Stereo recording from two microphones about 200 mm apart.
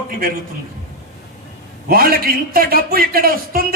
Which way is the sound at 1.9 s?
50° right (ahead or behind).